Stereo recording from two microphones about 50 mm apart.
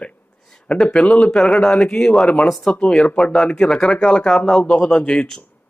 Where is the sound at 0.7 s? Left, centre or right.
Left.